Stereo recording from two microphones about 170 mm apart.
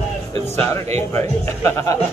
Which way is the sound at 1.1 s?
15° left (ahead or behind).